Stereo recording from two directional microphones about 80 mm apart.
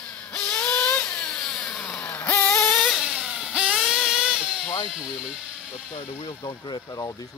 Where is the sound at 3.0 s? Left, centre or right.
Centre.